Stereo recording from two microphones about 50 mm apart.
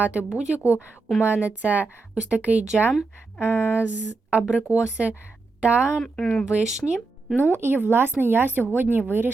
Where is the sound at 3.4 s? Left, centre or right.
Left.